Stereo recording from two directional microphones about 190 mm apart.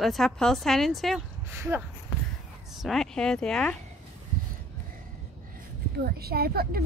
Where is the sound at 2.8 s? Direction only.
Centre (ahead or behind).